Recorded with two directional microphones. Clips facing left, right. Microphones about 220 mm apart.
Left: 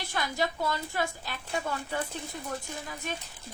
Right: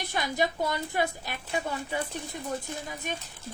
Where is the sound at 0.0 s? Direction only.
20° right (ahead or behind).